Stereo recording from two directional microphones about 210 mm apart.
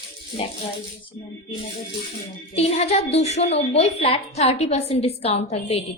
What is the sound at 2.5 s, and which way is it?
A woman's voice, 30° left (ahead or behind).